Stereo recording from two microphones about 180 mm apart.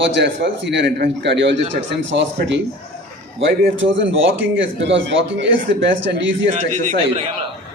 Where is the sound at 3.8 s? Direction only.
90° right.